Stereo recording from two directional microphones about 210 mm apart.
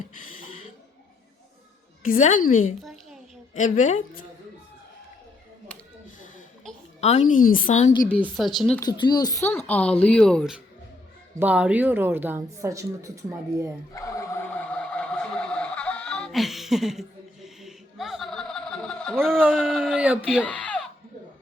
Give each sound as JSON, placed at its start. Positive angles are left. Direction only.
{"t": 2.0, "sound": "a woman's voice", "side_deg": 35}
{"t": 2.8, "sound": "a sound", "side_deg": 0}
{"t": 3.5, "sound": "a woman's voice", "side_deg": 35}
{"t": 7.0, "sound": "a woman's voice", "side_deg": 35}
{"t": 8.4, "sound": "speech", "side_deg": 0}
{"t": 8.8, "sound": "a child's voice", "side_deg": 20}
{"t": 13.9, "sound": "a sound", "side_deg": 15}
{"t": 19.5, "sound": "speech", "side_deg": 0}